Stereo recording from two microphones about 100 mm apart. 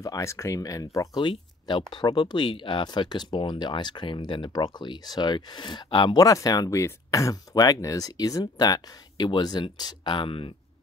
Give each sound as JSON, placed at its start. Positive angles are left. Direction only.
{"t": 0.0, "sound": "speech", "side_deg": 30}
{"t": 1.2, "sound": "speech", "side_deg": 60}
{"t": 6.1, "sound": "speech", "side_deg": 40}